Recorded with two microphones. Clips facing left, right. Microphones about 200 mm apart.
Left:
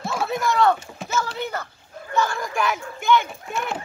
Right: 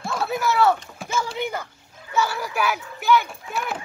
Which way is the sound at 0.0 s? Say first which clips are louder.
Even; centre (ahead or behind).